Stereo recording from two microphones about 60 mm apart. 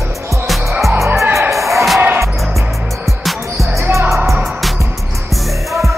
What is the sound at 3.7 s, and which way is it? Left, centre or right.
Basketball bounce, right.